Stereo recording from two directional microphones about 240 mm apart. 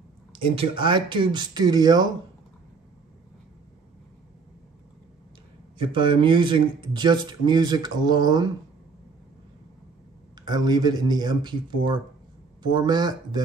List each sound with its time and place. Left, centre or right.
0.3 s speech: right
5.8 s speech: centre
10.4 s speech: centre